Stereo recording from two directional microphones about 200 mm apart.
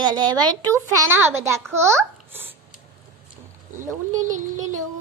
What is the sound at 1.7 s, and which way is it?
Babbling, 15° right (ahead or behind).